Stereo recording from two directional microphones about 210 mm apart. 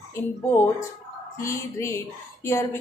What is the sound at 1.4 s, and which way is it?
Speech, 15° left (ahead or behind).